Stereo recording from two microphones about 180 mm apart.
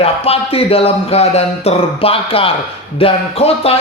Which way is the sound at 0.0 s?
35° left (ahead or behind).